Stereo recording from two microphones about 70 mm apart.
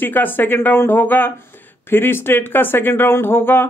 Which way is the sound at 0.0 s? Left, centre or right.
Left.